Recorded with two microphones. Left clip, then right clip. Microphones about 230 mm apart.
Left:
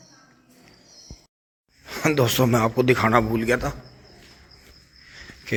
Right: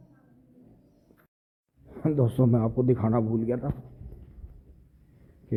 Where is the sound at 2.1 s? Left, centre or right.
Left.